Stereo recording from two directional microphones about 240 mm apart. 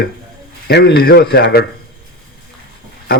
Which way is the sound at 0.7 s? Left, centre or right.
Left.